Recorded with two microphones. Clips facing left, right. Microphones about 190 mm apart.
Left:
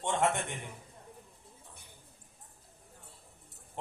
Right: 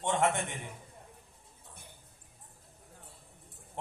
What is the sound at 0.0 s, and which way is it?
Speech, 20° right (ahead or behind).